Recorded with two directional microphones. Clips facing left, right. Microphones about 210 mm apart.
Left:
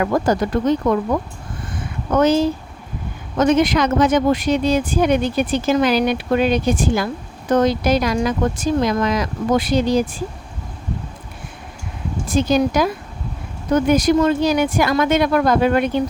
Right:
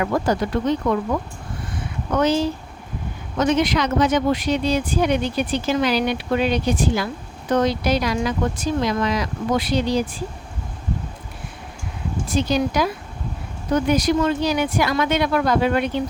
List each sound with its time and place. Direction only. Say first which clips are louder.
0.0 s speech: left 3 dB; 45° left (ahead or behind)
12.3 s speech: left 4 dB; 50° left (ahead or behind)